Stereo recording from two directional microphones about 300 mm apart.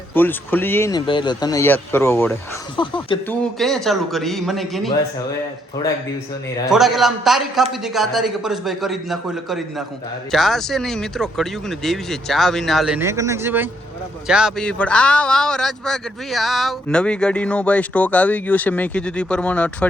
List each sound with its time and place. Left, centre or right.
0.1 s speech: centre
3.6 s a man's voice: centre
6.7 s a man's voice: centre